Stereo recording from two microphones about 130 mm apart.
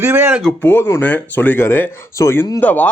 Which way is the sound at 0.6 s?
15° left (ahead or behind).